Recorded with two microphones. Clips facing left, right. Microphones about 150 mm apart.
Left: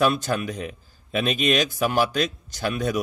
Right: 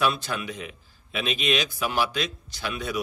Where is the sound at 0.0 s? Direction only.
45° left (ahead or behind).